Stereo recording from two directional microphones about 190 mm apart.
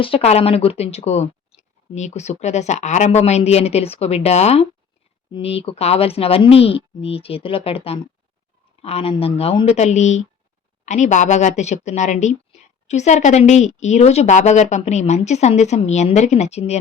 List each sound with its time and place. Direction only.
0.0 s a woman's voice: 30° left (ahead or behind)